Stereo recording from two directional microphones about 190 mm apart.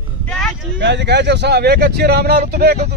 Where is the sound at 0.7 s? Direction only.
70° right (ahead or behind).